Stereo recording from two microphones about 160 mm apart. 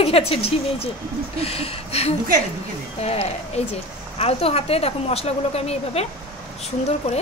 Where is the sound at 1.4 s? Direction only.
40° left (ahead or behind).